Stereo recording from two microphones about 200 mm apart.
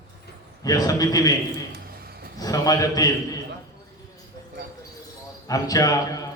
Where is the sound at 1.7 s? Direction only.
50° right (ahead or behind).